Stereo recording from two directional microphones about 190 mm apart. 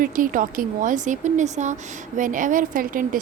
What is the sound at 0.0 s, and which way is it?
Speech, 45° right (ahead or behind).